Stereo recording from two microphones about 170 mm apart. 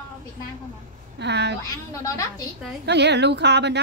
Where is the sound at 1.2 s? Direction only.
85° right.